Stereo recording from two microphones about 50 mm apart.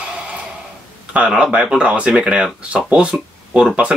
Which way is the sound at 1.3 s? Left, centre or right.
Centre.